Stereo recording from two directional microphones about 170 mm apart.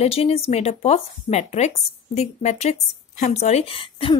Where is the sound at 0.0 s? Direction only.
35° left (ahead or behind).